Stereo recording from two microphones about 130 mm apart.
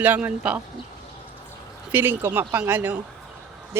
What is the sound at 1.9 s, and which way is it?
Speech, 15° right (ahead or behind).